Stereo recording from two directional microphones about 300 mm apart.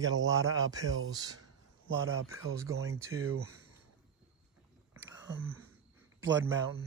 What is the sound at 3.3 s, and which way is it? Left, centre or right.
Speech, right.